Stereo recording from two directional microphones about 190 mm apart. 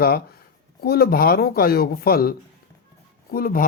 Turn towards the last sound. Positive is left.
turn(degrees=50)  # may be behind; listen again after turning